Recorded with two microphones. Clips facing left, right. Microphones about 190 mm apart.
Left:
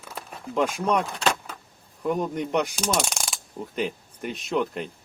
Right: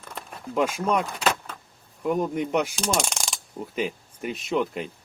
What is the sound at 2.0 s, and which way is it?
Coin, centre (ahead or behind).